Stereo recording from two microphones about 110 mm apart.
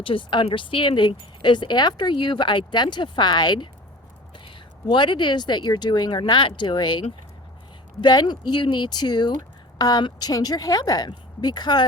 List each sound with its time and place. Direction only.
0.0 s speech: 50° left (ahead or behind)